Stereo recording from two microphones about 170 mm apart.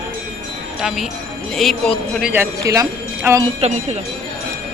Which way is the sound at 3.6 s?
40° right (ahead or behind).